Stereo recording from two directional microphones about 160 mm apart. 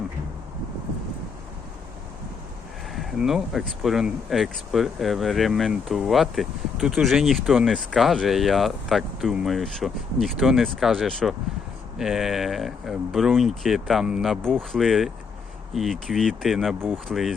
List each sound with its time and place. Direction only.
2.9 s speech: centre (ahead or behind)